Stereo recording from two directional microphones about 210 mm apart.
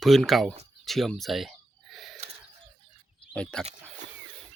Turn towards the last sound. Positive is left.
turn(degrees=5)  # may be behind; listen again after turning